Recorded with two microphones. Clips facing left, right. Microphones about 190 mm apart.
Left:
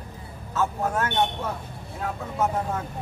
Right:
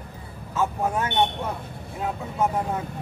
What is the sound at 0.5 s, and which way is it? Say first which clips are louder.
Speech: right 1 dB; 15° right (ahead or behind).